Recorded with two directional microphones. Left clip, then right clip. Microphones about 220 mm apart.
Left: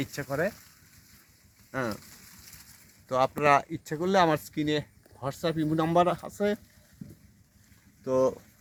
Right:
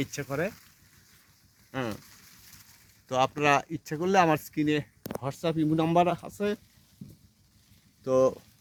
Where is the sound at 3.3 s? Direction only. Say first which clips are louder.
Left 2 dB; 30° right (ahead or behind).